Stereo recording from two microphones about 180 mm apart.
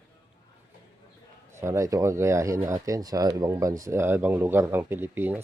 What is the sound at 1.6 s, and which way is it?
Speech, 15° right (ahead or behind).